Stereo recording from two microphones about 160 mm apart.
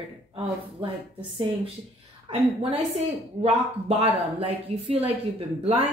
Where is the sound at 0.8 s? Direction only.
30° right (ahead or behind).